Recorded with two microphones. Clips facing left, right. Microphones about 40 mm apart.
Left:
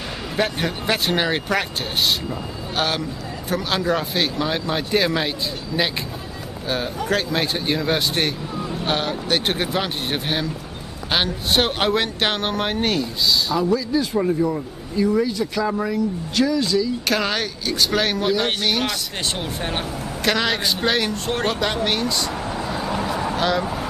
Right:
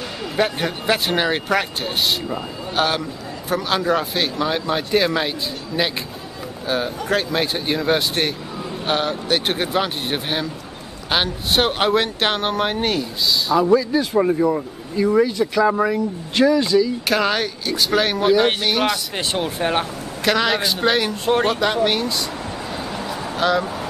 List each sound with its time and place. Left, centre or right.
0.4 s a man's voice: centre
13.7 s speech: centre